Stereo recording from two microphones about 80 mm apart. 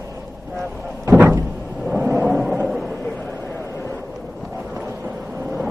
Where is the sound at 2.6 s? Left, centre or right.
Centre.